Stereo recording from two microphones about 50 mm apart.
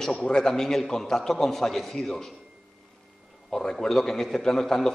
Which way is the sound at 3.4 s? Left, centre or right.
Centre.